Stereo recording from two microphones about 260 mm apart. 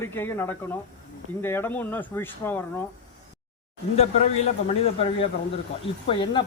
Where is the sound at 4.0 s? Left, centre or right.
Left.